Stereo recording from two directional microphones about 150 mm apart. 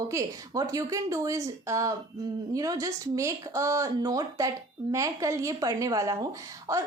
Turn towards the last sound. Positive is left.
turn(degrees=-20)  # may be behind; listen again after turning